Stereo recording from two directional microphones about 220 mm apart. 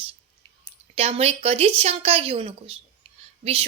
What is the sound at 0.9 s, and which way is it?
A woman's voice, 25° right (ahead or behind).